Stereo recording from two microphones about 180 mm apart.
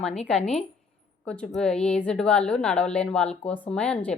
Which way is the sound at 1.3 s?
5° left (ahead or behind).